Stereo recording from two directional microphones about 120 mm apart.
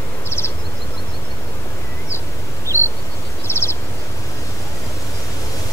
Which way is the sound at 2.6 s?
20° left (ahead or behind).